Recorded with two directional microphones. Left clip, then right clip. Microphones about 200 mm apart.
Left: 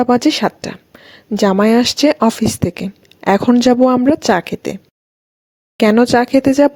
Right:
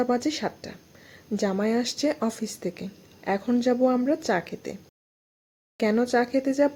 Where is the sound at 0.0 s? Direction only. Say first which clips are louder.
Left 12 dB; 45° left (ahead or behind).